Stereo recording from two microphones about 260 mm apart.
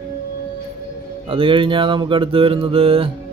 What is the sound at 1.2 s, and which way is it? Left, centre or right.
Mantra, right.